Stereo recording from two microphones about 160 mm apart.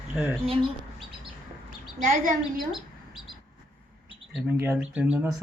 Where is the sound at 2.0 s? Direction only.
50° right (ahead or behind).